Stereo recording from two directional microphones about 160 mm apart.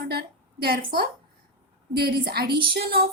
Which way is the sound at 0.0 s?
80° right.